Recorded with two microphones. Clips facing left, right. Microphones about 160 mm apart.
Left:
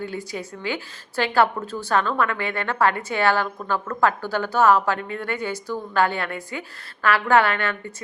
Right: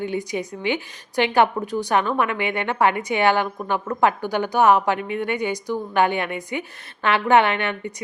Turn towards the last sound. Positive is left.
turn(degrees=-20)  # may be behind; listen again after turning